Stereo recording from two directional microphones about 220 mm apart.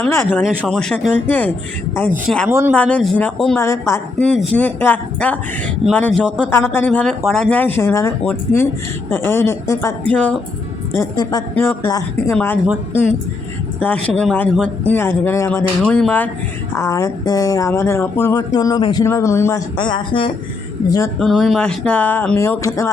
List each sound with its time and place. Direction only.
0.0 s speech: 10° left (ahead or behind)
2.5 s speech: 10° right (ahead or behind)
2.7 s speech: 5° left (ahead or behind)
3.6 s speech: 10° left (ahead or behind)
10.9 s speech: 15° left (ahead or behind)
13.7 s speech: 5° left (ahead or behind); by 20.3 s 20° left (ahead or behind)
21.2 s speech: centre (ahead or behind)